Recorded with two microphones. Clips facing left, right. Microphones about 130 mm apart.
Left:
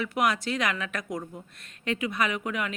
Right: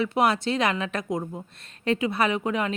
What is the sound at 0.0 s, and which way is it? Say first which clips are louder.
Speech: right 4 dB; 30° right (ahead or behind).